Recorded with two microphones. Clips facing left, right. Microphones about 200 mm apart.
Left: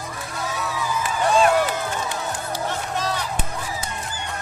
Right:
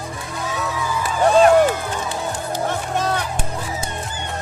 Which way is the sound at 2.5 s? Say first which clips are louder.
Right 5 dB; 55° right (ahead or behind).